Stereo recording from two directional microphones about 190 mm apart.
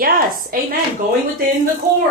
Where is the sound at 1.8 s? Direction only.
15° right (ahead or behind).